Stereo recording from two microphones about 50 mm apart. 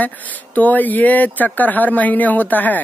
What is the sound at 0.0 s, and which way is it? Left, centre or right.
Speech, left.